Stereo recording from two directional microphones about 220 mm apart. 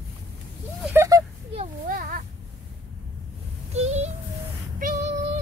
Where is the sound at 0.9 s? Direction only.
15° right (ahead or behind).